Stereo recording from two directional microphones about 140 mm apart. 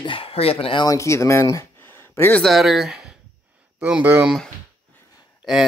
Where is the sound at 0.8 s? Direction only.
20° left (ahead or behind).